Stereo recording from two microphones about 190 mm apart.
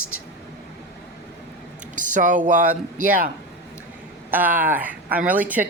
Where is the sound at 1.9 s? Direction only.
45° right (ahead or behind).